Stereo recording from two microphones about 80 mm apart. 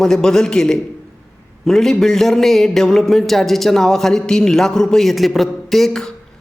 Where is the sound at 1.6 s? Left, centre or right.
Centre.